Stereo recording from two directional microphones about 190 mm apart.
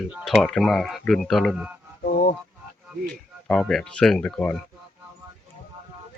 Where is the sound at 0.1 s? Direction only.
Centre (ahead or behind).